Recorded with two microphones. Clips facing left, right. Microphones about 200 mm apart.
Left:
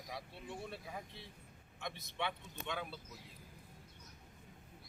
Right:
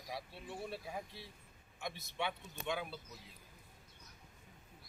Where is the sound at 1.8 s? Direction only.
10° right (ahead or behind).